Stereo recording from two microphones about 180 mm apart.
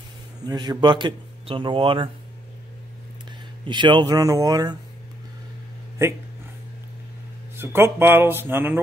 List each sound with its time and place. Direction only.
0.5 s speech: 25° right (ahead or behind)
3.6 s speech: 25° right (ahead or behind)
6.0 s speech: 15° right (ahead or behind)
7.5 s speech: 15° right (ahead or behind)